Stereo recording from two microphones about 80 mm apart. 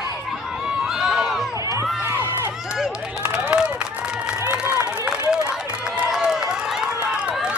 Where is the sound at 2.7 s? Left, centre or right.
Centre.